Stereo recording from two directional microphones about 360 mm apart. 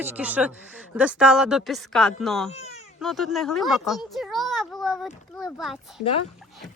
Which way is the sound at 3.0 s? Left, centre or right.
Centre.